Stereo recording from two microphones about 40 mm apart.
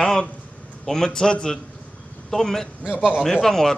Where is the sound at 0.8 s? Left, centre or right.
Centre.